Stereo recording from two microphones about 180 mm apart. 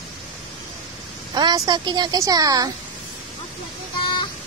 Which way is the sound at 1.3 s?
20° right (ahead or behind).